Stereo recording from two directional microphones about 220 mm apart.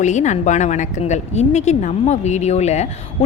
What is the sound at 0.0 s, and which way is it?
A woman's voice, 35° left (ahead or behind).